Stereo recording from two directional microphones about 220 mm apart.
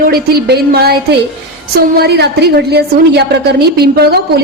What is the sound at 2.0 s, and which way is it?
A woman's voice, 50° right (ahead or behind).